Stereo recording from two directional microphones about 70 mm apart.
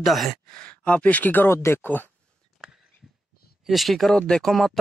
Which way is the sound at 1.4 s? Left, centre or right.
Left.